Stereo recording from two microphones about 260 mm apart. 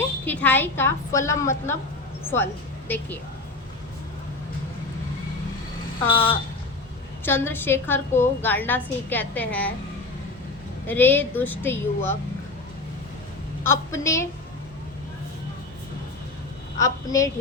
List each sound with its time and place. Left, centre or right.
0.3 s a woman's voice: centre
6.1 s speech: centre
7.3 s a woman's voice: centre
10.8 s a woman's voice: centre
13.7 s a woman's voice: centre
16.8 s a woman's voice: centre